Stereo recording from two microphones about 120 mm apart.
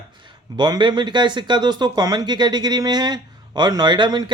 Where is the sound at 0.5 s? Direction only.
40° right (ahead or behind).